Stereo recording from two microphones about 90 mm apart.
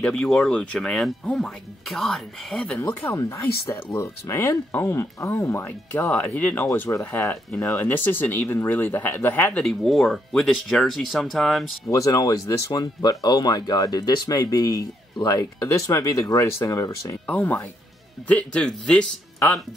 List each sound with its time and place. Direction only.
0.0 s speech: 5° left (ahead or behind)
2.9 s speech: 30° left (ahead or behind)
6.6 s speech: 30° left (ahead or behind)
9.6 s speech: 5° left (ahead or behind)
11.9 s speech: 35° left (ahead or behind)
15.6 s speech: 35° left (ahead or behind)
17.3 s speech: 15° left (ahead or behind)